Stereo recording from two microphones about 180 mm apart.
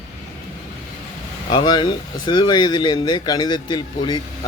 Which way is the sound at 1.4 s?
25° left (ahead or behind).